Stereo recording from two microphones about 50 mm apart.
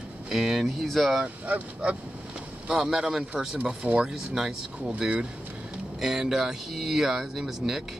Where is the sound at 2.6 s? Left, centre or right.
Centre.